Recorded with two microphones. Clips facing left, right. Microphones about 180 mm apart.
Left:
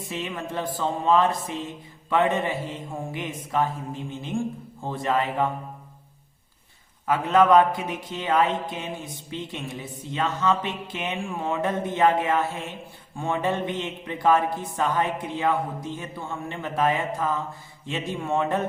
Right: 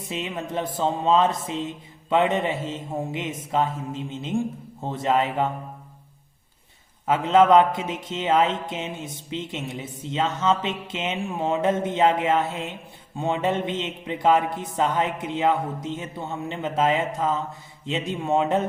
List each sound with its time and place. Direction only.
0.1 s speech: 20° right (ahead or behind)
7.1 s speech: 25° right (ahead or behind)